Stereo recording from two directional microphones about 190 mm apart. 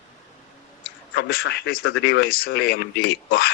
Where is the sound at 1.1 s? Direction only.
60° left (ahead or behind).